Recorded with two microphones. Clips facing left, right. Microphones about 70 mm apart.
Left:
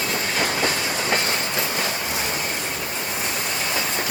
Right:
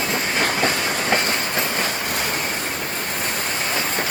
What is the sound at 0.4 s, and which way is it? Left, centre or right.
Train, right.